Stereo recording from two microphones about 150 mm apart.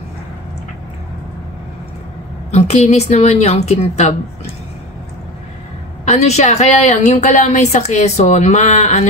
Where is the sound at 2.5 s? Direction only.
45° left (ahead or behind).